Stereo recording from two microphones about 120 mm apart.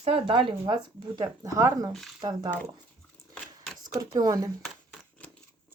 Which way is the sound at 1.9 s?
Centre (ahead or behind).